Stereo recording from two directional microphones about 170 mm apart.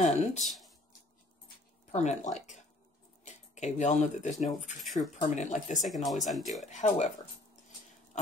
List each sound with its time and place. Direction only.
0.4 s speech: centre (ahead or behind)
1.9 s speech: 45° left (ahead or behind)
4.8 s speech: centre (ahead or behind)
5.1 s speech: 45° left (ahead or behind)
5.9 s speech: centre (ahead or behind)
6.7 s speech: 40° left (ahead or behind)